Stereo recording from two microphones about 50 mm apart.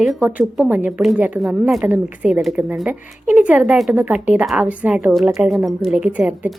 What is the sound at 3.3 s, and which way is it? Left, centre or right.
A woman's voice, right.